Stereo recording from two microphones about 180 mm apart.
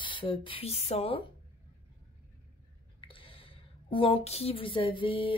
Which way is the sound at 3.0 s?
30° left (ahead or behind).